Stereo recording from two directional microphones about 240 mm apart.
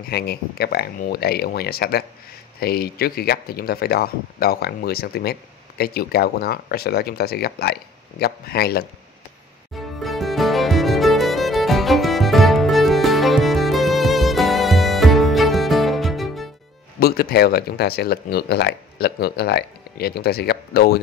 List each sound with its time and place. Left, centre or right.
0.1 s speech: left
9.8 s music: centre
17.0 s speech: left